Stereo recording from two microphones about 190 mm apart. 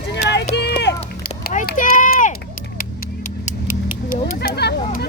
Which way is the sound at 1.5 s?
50° left (ahead or behind).